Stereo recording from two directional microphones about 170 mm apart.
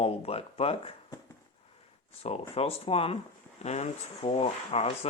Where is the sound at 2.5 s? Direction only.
35° left (ahead or behind).